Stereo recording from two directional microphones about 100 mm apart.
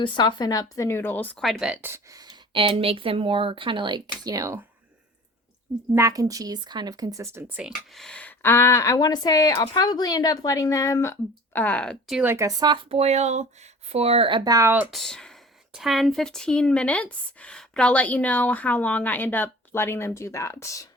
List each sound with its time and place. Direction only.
0.0 s speech: 50° left (ahead or behind); by 1.4 s 20° left (ahead or behind)
1.4 s speech: 5° left (ahead or behind)
1.8 s speech: 20° right (ahead or behind)
2.5 s speech: 60° right (ahead or behind); by 4.6 s 35° right (ahead or behind)
5.9 s speech: 35° right (ahead or behind)
7.4 s speech: 10° right (ahead or behind)
7.7 s speech: 5° left (ahead or behind); by 11.1 s 35° left (ahead or behind)
11.5 s speech: 15° left (ahead or behind)
12.2 s speech: 25° right (ahead or behind)
12.5 s speech: 40° right (ahead or behind)
12.7 s speech: 85° right
14.3 s speech: 55° right (ahead or behind)
14.8 s speech: 5° left (ahead or behind); by 20.8 s 30° left (ahead or behind)